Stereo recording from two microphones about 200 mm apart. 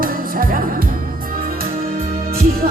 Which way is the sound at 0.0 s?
45° right (ahead or behind).